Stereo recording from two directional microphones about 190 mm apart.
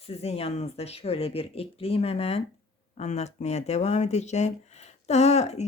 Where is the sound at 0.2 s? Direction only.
35° left (ahead or behind).